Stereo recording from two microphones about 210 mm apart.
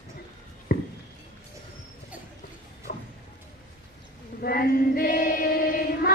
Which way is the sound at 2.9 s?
45° left (ahead or behind).